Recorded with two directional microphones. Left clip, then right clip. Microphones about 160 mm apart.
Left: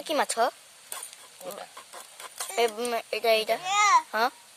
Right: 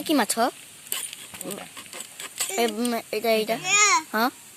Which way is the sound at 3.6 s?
80° left.